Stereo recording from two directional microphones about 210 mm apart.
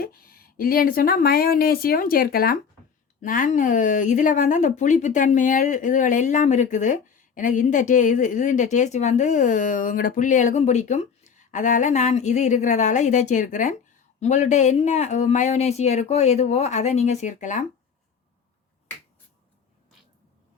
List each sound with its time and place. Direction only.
0.0 s speech: 45° left (ahead or behind)